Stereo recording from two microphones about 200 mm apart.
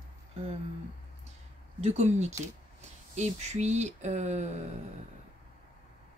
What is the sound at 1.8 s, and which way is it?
Speech, 35° right (ahead or behind).